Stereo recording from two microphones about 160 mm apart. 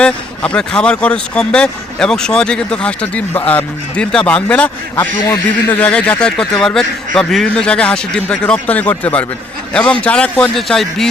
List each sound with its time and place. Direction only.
0.0 s speech: 5° left (ahead or behind)
5.2 s speech: 20° left (ahead or behind)
5.8 s speech: 10° left (ahead or behind)